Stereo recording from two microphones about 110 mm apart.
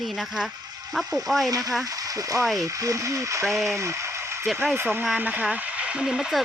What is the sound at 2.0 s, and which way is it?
Speech, 30° right (ahead or behind).